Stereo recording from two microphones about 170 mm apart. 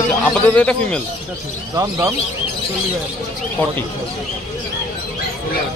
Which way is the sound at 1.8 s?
15° right (ahead or behind).